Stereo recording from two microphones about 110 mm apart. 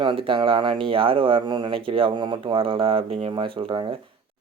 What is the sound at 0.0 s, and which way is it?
Speech, 50° right (ahead or behind).